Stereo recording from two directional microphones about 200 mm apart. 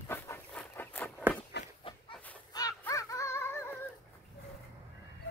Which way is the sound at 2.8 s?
15° left (ahead or behind).